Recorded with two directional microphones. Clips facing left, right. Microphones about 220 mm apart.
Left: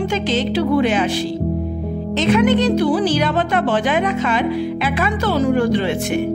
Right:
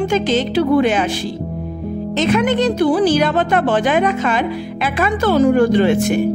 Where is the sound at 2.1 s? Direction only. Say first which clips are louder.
Left 1 dB; 45° right (ahead or behind).